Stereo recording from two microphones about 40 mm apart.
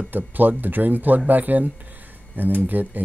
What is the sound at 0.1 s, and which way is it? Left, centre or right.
Speech, right.